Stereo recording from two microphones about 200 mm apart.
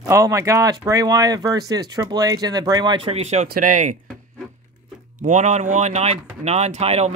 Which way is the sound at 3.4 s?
40° right (ahead or behind).